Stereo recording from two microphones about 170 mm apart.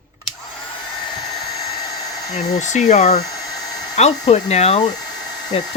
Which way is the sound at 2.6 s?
45° left (ahead or behind).